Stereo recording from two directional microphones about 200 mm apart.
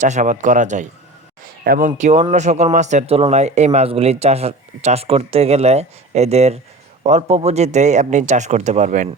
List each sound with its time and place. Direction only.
0.0 s speech: 40° right (ahead or behind)
1.6 s speech: 45° right (ahead or behind)
2.0 s speech: 35° right (ahead or behind)